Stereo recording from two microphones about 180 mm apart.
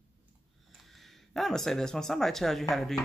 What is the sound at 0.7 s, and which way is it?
Speech, centre (ahead or behind).